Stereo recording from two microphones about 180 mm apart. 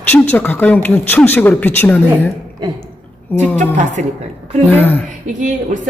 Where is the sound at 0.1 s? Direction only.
10° left (ahead or behind).